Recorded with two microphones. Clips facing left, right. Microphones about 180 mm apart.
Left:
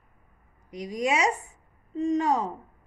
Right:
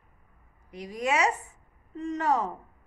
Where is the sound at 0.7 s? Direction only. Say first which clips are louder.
Left 2 dB; 15° left (ahead or behind).